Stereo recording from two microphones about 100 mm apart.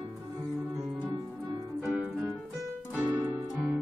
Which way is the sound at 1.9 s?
10° right (ahead or behind).